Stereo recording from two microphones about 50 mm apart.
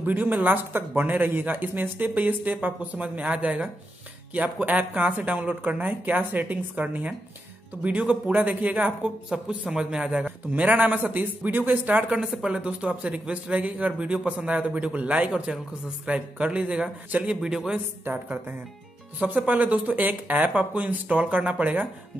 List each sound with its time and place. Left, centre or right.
0.0 s a man's voice: right
9.3 s a man's voice: centre
10.2 s speech: right
12.2 s a man's voice: centre
19.1 s a man's voice: right